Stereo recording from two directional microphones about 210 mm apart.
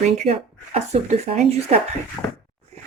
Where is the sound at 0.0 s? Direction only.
30° right (ahead or behind).